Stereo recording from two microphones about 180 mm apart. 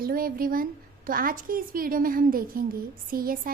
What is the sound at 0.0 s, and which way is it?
A woman's voice, 55° right (ahead or behind).